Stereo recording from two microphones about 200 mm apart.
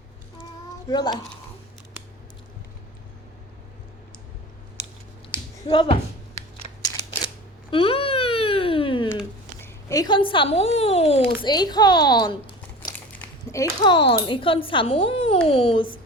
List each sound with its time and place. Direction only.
0.9 s a woman's voice: 20° left (ahead or behind)
5.6 s a woman's voice: 25° left (ahead or behind)
7.7 s a sound: 25° left (ahead or behind)
9.6 s speech: 15° left (ahead or behind)
11.4 s a woman's voice: 20° left (ahead or behind)